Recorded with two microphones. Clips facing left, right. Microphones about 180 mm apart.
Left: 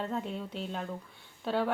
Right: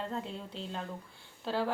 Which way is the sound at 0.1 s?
Centre (ahead or behind).